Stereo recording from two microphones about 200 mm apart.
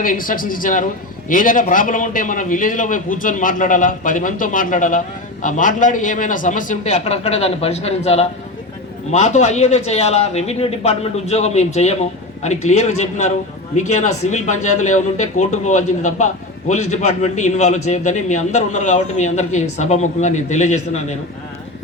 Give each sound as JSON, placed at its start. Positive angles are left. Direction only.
{"t": 0.0, "sound": "a man's voice", "side_deg": 45}